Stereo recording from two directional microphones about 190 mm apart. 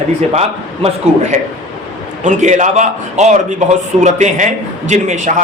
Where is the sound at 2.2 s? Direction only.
40° right (ahead or behind).